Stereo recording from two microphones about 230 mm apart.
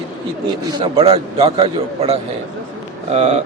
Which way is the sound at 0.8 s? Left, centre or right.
Right.